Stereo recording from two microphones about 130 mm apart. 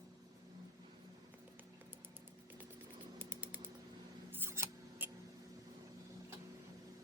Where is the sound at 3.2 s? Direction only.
15° right (ahead or behind).